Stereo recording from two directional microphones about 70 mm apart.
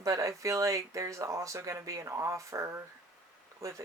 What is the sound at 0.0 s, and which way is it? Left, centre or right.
Speech, right.